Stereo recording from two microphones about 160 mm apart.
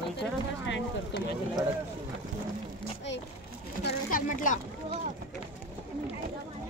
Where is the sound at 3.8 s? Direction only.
60° left (ahead or behind).